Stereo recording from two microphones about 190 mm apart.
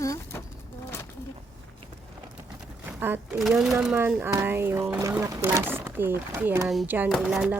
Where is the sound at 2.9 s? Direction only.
10° right (ahead or behind).